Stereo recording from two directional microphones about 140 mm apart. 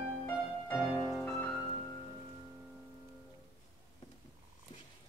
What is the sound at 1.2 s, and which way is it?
Music, 10° left (ahead or behind).